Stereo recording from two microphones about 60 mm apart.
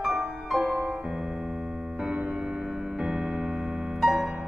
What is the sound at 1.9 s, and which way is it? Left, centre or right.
Music, centre.